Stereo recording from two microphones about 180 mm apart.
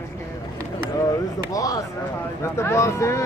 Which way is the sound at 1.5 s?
20° left (ahead or behind).